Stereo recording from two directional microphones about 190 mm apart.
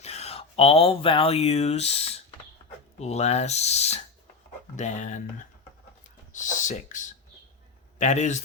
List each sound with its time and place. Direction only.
0.0 s speech: 35° left (ahead or behind)